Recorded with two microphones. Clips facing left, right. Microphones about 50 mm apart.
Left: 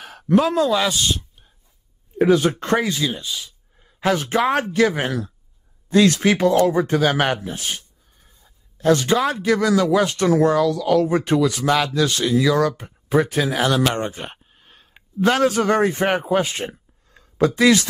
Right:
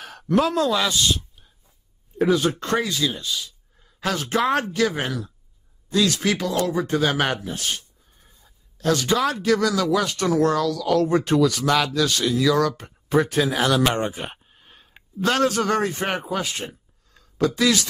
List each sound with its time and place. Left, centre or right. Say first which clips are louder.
0.0 s speech: left 3 dB; centre
2.6 s speech: left 3 dB; left
3.1 s a sound: left 1 dB; centre
4.4 s speech: right 1 dB; centre
4.6 s speech: left 4 dB; left
5.9 s speech: left 5 dB; left
6.9 s speech: left 3 dB; centre
8.2 s a sound: even; centre
8.7 s speech: left 4 dB; left
10.4 s speech: left 3 dB; centre
13.8 s speech: even; centre
14.2 s a sound: even; centre
15.2 s speech: left 3 dB; centre; by 17.8 s left